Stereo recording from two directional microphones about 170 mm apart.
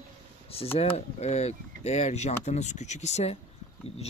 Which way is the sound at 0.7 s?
40° left (ahead or behind).